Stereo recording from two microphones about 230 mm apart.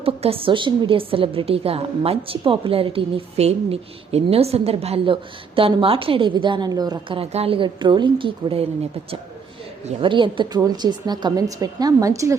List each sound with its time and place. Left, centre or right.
0.0 s a woman's voice: right
9.8 s speech: right